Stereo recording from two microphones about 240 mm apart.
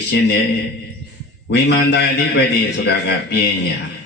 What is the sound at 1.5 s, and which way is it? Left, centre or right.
Speech, left.